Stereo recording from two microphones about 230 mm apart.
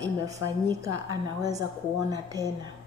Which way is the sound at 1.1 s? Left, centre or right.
Centre.